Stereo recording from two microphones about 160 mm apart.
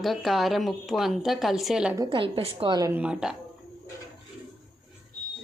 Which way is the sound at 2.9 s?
5° right (ahead or behind).